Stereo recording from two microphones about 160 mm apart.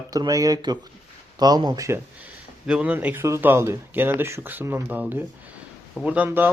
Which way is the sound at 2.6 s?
5° right (ahead or behind).